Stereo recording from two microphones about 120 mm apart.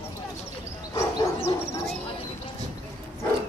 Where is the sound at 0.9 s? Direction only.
25° left (ahead or behind).